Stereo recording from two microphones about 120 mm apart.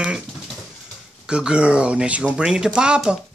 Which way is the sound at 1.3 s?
5° right (ahead or behind).